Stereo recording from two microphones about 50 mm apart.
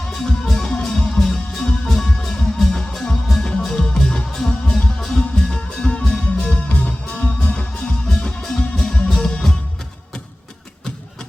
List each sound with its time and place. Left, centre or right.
0.0 s music: centre; by 7.7 s left
7.8 s music: centre